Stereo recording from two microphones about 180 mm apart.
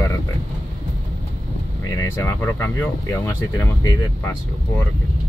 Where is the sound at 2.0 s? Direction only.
15° left (ahead or behind).